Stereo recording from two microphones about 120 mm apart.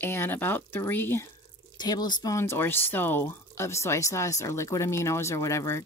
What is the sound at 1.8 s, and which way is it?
Speech, 35° left (ahead or behind).